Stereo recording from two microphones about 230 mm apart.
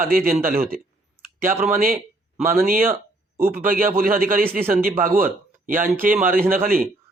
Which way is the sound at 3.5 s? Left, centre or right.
Right.